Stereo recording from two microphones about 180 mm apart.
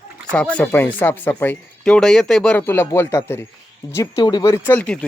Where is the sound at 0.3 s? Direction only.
5° left (ahead or behind).